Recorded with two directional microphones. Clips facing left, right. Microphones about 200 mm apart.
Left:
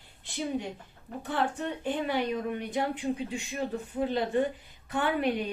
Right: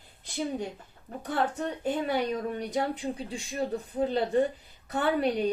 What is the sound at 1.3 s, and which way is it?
Speech, 40° right (ahead or behind).